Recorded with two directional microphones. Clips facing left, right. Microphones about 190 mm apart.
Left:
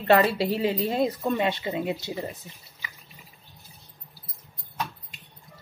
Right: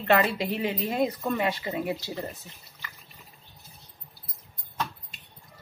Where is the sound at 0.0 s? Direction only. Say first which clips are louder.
Left 3 dB; 35° left (ahead or behind); by 2.3 s 15° left (ahead or behind).